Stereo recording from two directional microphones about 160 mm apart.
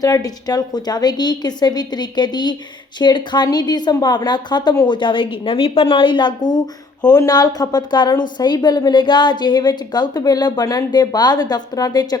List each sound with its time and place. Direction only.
0.0 s a woman's voice: 25° left (ahead or behind)